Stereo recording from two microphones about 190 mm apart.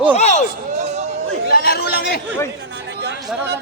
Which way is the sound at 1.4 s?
55° left (ahead or behind).